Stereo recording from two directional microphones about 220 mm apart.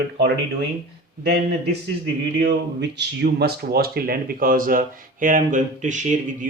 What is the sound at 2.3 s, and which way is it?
Speech, 50° right (ahead or behind).